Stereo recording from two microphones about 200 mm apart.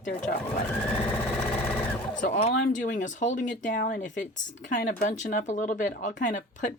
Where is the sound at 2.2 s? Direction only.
40° left (ahead or behind).